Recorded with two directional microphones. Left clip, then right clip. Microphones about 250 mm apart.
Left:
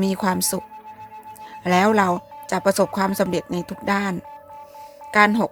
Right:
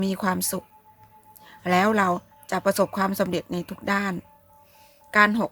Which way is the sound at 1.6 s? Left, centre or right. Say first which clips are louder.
Left 3 dB; centre.